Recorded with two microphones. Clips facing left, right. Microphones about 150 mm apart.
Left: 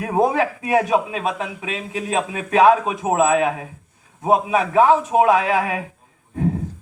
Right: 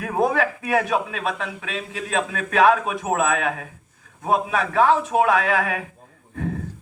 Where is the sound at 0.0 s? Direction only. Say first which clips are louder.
Left 3 dB; 20° left (ahead or behind).